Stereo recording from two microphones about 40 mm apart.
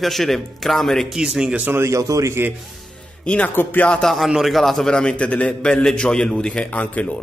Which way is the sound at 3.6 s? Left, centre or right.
Left.